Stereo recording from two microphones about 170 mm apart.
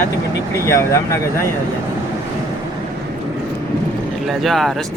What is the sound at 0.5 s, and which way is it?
Speech, 15° left (ahead or behind).